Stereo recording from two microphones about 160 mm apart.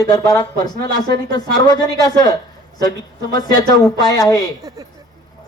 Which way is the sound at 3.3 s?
25° left (ahead or behind).